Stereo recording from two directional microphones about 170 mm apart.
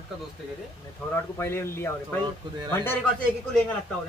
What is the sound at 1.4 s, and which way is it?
Speech, 15° left (ahead or behind).